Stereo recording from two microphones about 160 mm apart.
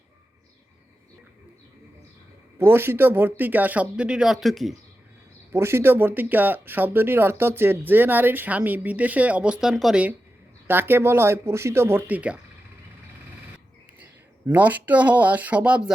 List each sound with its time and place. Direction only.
2.6 s speech: 15° right (ahead or behind)
5.5 s speech: 15° right (ahead or behind)
14.0 s speech: 10° right (ahead or behind)